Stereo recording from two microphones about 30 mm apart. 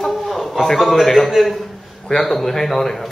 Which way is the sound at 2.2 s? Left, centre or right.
Centre.